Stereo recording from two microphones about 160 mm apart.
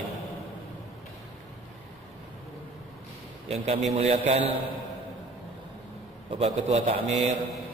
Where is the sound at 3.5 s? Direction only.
40° right (ahead or behind).